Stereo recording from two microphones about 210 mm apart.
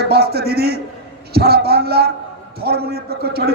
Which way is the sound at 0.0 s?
50° right (ahead or behind).